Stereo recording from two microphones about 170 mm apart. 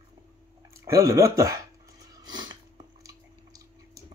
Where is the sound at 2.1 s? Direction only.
25° right (ahead or behind).